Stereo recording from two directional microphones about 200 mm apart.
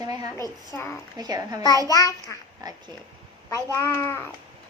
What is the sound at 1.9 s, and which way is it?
Speech, 15° left (ahead or behind).